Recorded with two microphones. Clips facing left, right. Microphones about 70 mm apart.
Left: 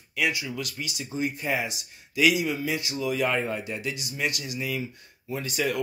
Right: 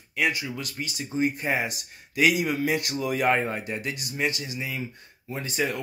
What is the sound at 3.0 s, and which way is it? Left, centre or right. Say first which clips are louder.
Speech: right 2 dB; right.